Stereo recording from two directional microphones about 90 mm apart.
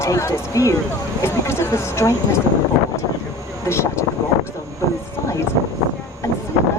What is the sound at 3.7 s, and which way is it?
Speech, 30° left (ahead or behind).